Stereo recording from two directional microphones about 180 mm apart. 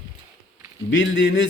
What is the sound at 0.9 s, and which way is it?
Speech, 90° left.